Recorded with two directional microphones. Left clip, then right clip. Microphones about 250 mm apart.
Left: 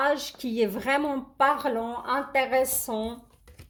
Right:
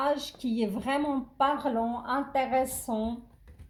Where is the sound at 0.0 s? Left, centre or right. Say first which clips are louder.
Left 3 dB; left.